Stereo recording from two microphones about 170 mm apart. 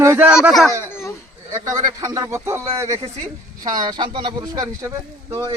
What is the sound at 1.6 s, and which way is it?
Speech, 20° right (ahead or behind).